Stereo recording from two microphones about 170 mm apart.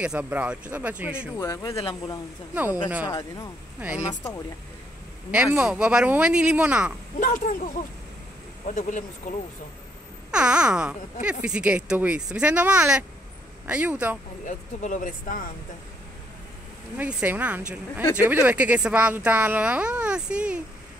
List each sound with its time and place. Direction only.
0.0 s speech: 10° right (ahead or behind)
1.4 s speech: 15° left (ahead or behind)
3.1 s speech: 20° left (ahead or behind)
5.3 s speech: 5° right (ahead or behind)
7.2 s speech: 50° left (ahead or behind)
10.3 s speech: 5° right (ahead or behind)
14.4 s speech: 45° left (ahead or behind)
16.9 s speech: 10° right (ahead or behind)